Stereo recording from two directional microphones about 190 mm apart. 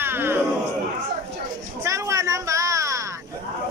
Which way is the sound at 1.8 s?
15° right (ahead or behind).